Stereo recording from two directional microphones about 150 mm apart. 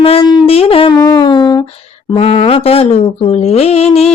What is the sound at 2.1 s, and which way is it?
Speech, 40° left (ahead or behind).